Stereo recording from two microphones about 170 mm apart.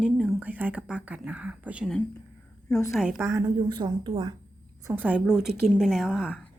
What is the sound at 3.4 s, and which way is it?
Speech, 20° right (ahead or behind).